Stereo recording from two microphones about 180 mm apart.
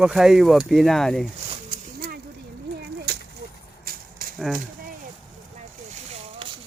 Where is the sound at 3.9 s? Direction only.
55° right (ahead or behind).